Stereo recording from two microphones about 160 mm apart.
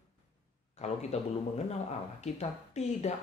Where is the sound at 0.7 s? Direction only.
40° left (ahead or behind).